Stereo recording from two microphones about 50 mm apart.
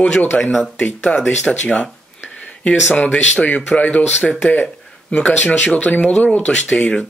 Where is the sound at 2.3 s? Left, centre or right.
Centre.